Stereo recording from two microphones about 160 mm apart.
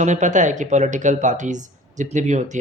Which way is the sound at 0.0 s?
50° right (ahead or behind).